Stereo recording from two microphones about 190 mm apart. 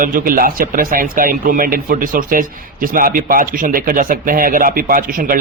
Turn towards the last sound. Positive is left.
turn(degrees=-45)  # may be behind; listen again after turning